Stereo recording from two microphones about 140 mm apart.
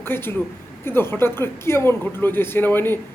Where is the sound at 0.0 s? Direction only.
15° left (ahead or behind).